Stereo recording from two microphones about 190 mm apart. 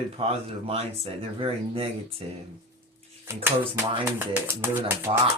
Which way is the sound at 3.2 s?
10° right (ahead or behind).